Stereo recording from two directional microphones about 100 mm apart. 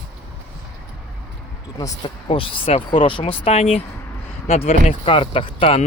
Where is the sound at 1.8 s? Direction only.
50° left (ahead or behind).